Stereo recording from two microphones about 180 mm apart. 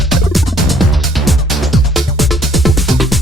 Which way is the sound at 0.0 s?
Centre (ahead or behind).